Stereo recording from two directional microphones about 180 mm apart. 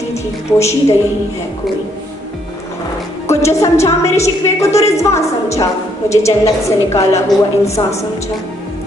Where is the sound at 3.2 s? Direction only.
15° left (ahead or behind).